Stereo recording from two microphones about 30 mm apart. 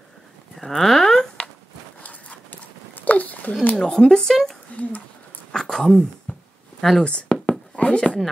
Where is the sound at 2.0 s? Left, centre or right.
Left.